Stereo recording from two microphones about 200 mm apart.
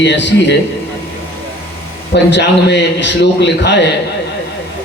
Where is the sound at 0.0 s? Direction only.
60° left (ahead or behind).